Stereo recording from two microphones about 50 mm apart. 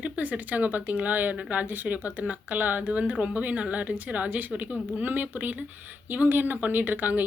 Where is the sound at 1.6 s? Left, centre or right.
Right.